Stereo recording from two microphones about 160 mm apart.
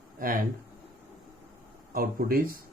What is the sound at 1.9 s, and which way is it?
Speech, 65° right (ahead or behind).